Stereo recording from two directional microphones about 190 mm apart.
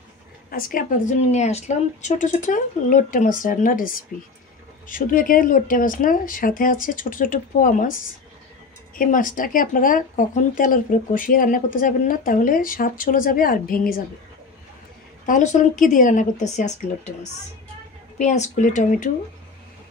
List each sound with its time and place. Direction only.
0.5 s speech: 45° left (ahead or behind)
8.9 s speech: 45° left (ahead or behind)
15.2 s speech: 40° left (ahead or behind)